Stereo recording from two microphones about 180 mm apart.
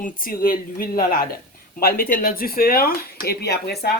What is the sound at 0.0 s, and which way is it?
Speech, 50° left (ahead or behind).